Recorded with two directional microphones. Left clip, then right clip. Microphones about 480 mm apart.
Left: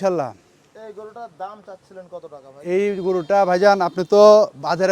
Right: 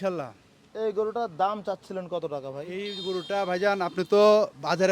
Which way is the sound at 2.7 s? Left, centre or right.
Left.